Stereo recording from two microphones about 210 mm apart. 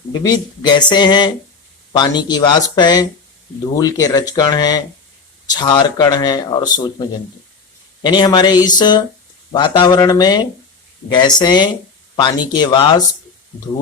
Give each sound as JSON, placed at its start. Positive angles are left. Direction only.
{"t": 0.1, "sound": "speech", "side_deg": 20}